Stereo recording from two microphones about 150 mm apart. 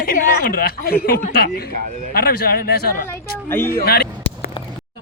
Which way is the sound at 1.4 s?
90° left.